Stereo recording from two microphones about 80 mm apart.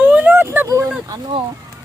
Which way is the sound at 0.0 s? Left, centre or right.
Centre.